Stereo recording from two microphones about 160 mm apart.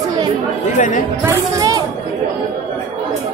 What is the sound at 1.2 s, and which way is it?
Speech, 20° right (ahead or behind).